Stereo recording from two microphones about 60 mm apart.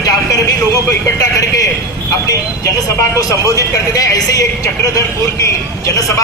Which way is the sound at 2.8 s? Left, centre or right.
Left.